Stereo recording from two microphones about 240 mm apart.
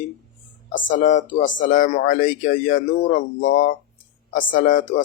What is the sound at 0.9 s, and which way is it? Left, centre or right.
Speech, left.